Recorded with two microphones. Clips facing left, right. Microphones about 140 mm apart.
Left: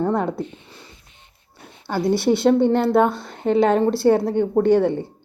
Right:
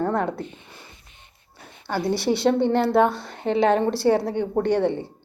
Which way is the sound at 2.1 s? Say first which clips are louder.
Left 5 dB; 50° left (ahead or behind).